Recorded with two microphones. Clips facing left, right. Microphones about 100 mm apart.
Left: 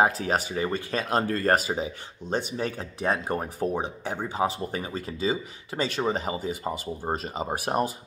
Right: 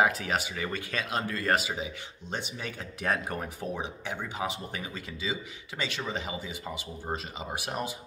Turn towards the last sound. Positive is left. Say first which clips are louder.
# left 8 dB
turn(degrees=45)  # may be behind; listen again after turning